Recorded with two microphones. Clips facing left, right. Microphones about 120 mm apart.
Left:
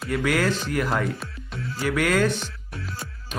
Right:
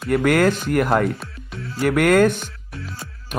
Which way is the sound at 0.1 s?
55° right (ahead or behind).